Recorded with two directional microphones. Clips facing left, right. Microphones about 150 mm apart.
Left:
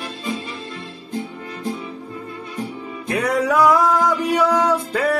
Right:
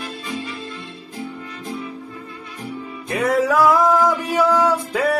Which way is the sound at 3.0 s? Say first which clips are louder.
Right 1 dB; centre (ahead or behind).